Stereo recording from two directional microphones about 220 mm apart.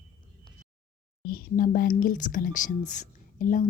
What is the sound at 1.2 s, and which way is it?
Speech, 40° left (ahead or behind).